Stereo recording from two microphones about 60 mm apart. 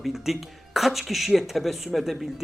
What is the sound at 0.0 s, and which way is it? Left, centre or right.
Speech, centre.